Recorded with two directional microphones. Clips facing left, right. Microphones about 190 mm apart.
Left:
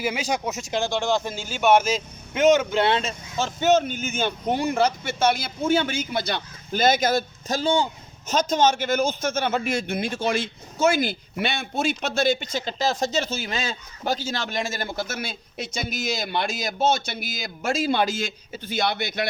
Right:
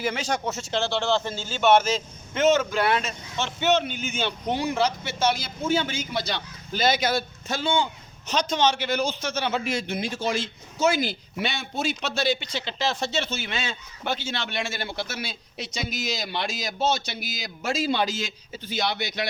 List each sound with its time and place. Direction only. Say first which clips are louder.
0.0 s a man's voice: left 1 dB; 10° left (ahead or behind); by 19.3 s 50° left (ahead or behind)